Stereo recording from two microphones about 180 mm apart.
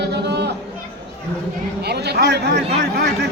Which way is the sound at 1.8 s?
65° right (ahead or behind).